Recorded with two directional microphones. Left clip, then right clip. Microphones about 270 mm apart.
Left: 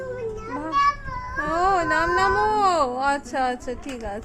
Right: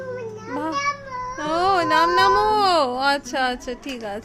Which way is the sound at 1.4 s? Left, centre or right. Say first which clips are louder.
Right 1 dB; centre.